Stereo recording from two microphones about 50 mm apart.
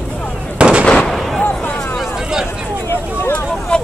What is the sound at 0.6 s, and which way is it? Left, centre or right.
Fireworks, right.